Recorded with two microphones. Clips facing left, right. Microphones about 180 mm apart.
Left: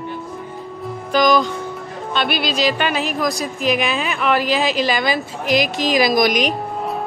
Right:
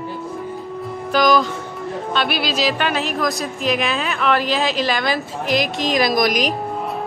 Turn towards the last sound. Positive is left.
turn(degrees=0)  # may be behind; listen again after turning